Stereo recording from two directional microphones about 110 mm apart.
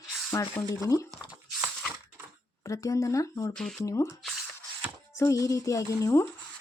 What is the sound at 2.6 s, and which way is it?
Speech, 30° left (ahead or behind).